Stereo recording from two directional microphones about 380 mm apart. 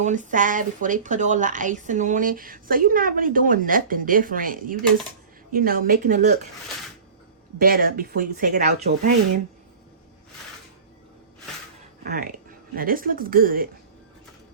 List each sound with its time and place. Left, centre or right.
0.0 s speech: centre
7.6 s speech: right
12.0 s speech: right